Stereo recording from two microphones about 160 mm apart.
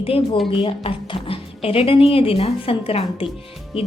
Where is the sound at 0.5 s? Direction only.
35° left (ahead or behind).